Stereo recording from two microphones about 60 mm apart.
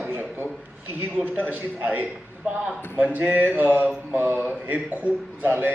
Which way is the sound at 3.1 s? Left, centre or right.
Right.